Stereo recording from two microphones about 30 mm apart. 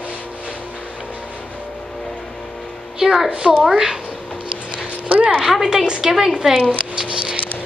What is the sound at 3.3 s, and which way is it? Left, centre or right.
Speech, right.